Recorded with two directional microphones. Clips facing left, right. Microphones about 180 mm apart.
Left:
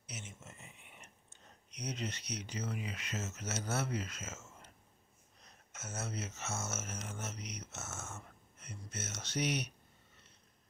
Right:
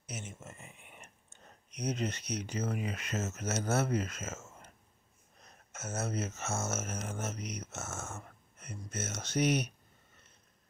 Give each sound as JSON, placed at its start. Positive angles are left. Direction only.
{"t": 0.0, "sound": "whispering", "side_deg": -50}
{"t": 5.4, "sound": "speech", "side_deg": -50}